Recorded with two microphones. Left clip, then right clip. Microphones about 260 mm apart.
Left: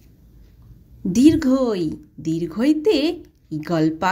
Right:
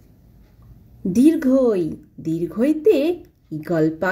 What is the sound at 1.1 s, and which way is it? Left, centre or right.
A woman's voice, left.